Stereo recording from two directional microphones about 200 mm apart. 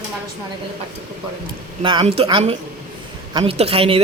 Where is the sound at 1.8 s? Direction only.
25° right (ahead or behind).